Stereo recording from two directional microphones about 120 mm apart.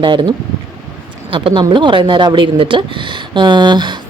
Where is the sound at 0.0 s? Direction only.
40° right (ahead or behind).